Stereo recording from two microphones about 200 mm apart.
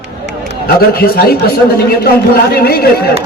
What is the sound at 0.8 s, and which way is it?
A man's voice, 50° left (ahead or behind).